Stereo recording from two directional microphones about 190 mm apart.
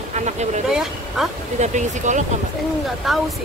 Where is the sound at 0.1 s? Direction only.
35° right (ahead or behind).